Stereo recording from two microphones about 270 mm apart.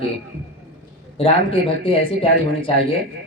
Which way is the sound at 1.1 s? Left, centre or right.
Centre.